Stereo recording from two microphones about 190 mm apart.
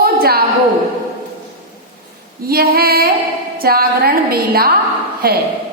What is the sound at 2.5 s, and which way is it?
Female singing, 50° right (ahead or behind).